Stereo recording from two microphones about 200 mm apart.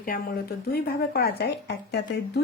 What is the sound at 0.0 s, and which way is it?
Speech, 45° left (ahead or behind).